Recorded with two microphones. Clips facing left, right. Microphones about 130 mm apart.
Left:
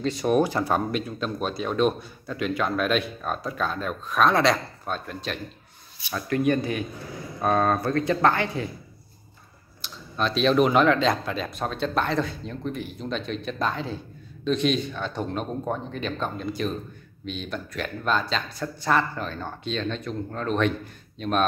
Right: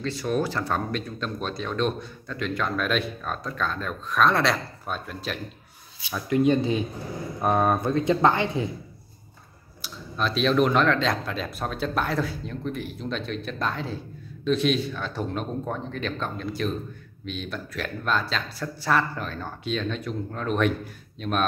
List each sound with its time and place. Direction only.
0.0 s speech: 20° left (ahead or behind); by 5.4 s 5° right (ahead or behind)
6.2 s speech: 20° right (ahead or behind)
9.8 s speech: 5° right (ahead or behind)